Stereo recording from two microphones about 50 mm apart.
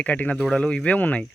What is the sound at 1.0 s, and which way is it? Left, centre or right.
Speech, left.